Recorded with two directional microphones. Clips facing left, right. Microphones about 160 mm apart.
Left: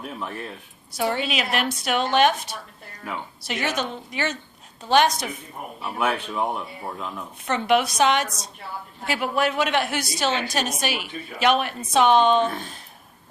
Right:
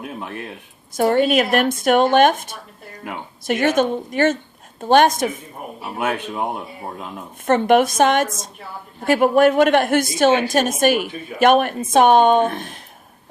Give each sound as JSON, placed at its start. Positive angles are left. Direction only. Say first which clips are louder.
{"t": 0.9, "sound": "a woman's voice", "louder": "right 9 dB", "side_deg": -50}
{"t": 7.4, "sound": "a woman's voice", "louder": "right 7 dB", "side_deg": -50}